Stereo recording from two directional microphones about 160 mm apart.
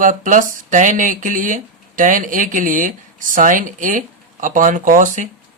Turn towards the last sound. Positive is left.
turn(degrees=-55)  # may be behind; listen again after turning